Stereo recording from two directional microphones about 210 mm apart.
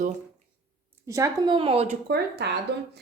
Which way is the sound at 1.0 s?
15° right (ahead or behind).